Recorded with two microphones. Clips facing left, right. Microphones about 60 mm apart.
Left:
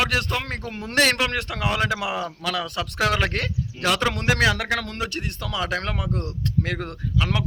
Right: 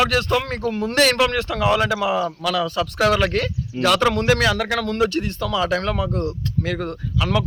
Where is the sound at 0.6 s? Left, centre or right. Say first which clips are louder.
Right 4 dB; left.